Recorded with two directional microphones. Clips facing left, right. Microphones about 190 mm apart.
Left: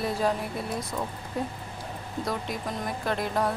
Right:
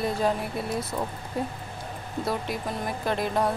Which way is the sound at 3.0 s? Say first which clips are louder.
Right 2 dB; centre (ahead or behind).